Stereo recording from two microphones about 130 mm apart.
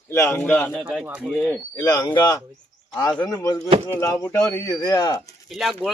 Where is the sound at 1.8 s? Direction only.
30° left (ahead or behind).